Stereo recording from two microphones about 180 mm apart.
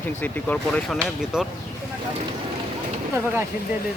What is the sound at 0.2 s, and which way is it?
Speech, 10° left (ahead or behind).